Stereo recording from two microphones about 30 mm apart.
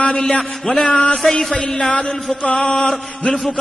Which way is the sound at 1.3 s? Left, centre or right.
Left.